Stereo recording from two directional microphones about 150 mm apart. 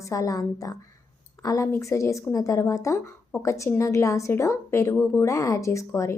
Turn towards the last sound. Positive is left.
turn(degrees=20)  # may be behind; listen again after turning